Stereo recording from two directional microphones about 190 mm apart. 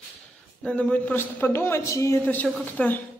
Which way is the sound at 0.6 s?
5° left (ahead or behind).